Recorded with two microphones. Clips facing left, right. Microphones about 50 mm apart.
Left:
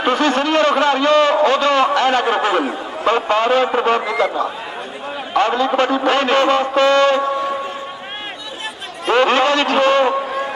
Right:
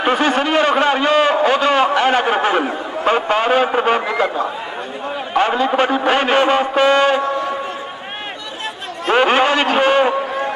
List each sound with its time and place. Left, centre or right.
0.0 s a sound: centre
2.6 s a man's voice: centre
3.1 s a man's voice: centre
9.0 s a man's voice: centre